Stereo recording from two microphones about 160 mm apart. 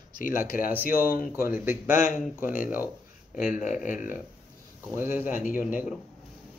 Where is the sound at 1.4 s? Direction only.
15° right (ahead or behind).